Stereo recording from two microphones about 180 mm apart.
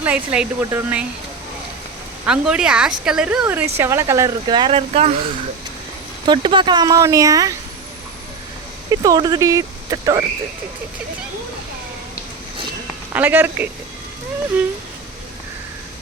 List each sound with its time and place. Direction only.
0.0 s speech: 10° right (ahead or behind)
2.2 s speech: 5° right (ahead or behind); by 5.1 s 35° right (ahead or behind)
6.2 s speech: 25° right (ahead or behind)
8.9 s speech: 20° right (ahead or behind)
13.1 s speech: 10° right (ahead or behind)